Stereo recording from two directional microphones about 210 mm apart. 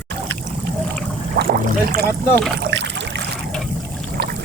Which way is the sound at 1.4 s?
50° right (ahead or behind).